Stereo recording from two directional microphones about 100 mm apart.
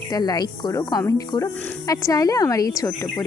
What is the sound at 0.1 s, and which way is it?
Speech, 40° left (ahead or behind).